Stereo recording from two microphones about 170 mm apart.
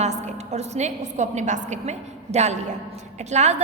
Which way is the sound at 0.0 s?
40° right (ahead or behind).